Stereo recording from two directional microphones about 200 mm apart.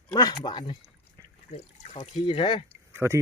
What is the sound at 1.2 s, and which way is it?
Liquid, 15° right (ahead or behind).